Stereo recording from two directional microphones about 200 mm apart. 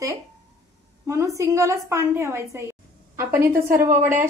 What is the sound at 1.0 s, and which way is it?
A woman's voice, 15° right (ahead or behind).